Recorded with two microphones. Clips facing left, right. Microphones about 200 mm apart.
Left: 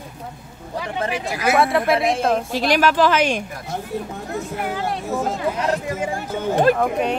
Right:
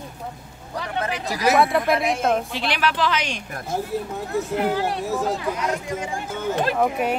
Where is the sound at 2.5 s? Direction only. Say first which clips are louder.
Left 6 dB; 40° left (ahead or behind).